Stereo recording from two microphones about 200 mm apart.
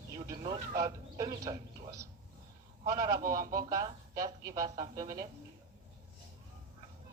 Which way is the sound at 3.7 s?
15° right (ahead or behind).